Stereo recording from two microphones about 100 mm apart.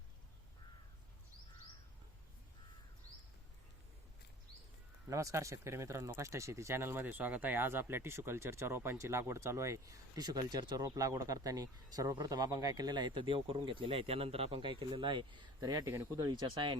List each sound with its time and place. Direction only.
5.0 s speech: 30° right (ahead or behind); by 16.7 s 50° right (ahead or behind)